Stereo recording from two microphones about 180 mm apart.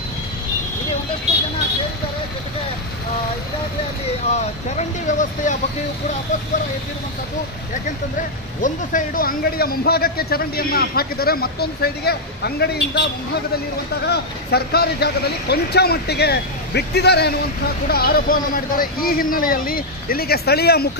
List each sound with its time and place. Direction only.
4.3 s speech: 40° left (ahead or behind)
8.5 s a man's voice: 45° left (ahead or behind); by 13.0 s 65° left (ahead or behind)
14.0 s a man's voice: 60° left (ahead or behind)